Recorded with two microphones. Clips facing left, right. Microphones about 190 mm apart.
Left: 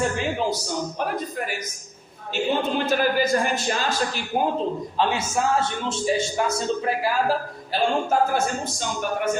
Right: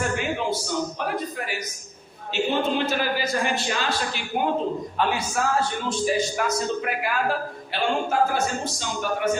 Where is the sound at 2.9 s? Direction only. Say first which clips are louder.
Left 5 dB; 50° left (ahead or behind).